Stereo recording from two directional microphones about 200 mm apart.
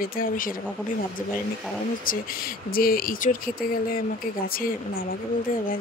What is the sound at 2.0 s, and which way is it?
Speech, 45° left (ahead or behind).